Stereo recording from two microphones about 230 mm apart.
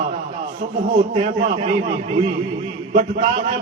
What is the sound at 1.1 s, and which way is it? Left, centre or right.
Speech, right.